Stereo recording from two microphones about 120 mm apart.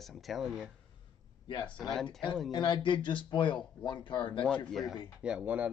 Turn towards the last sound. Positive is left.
turn(degrees=-10)  # may be behind; listen again after turning